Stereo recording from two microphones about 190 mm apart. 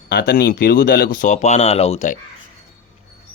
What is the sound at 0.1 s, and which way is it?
Speech, 55° left (ahead or behind).